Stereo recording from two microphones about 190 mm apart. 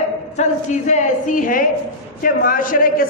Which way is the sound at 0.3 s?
40° left (ahead or behind).